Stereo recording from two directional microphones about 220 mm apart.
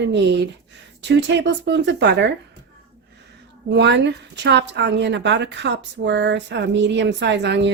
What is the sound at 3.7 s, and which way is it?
Speech, 50° right (ahead or behind).